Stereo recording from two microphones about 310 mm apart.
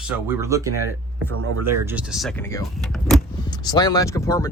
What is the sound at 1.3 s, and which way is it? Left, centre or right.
Speech, right.